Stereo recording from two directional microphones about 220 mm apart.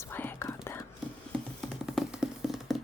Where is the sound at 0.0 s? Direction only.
10° left (ahead or behind).